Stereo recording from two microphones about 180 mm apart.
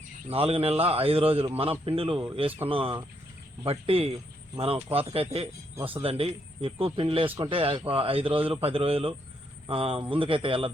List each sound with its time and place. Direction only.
0.3 s a man's voice: 30° right (ahead or behind)